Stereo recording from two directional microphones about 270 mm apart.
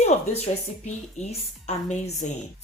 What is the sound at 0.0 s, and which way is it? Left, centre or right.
Speech, left.